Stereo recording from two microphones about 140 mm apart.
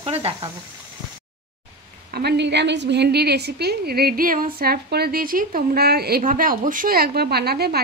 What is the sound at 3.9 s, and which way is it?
A woman's voice, 90° right.